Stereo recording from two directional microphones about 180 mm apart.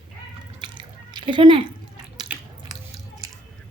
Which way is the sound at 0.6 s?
25° right (ahead or behind).